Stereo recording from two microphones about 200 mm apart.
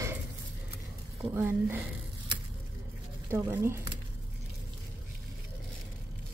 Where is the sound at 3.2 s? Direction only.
15° right (ahead or behind).